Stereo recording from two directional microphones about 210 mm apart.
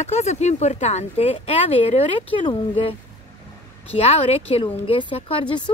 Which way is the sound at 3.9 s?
30° left (ahead or behind).